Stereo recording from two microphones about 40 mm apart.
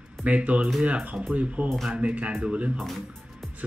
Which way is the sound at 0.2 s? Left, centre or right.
Right.